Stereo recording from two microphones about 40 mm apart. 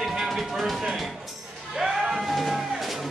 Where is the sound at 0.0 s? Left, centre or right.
Centre.